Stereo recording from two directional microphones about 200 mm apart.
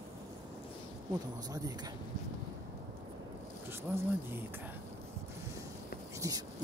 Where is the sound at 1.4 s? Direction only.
20° right (ahead or behind).